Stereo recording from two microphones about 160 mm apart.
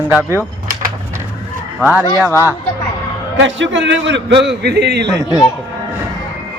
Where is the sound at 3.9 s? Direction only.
90° right.